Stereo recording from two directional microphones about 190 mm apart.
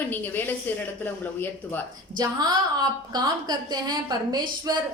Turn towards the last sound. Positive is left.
turn(degrees=-20)  # may be behind; listen again after turning